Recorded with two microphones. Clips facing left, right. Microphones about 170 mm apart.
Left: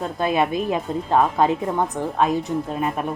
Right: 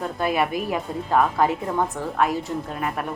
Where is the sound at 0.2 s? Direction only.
20° left (ahead or behind).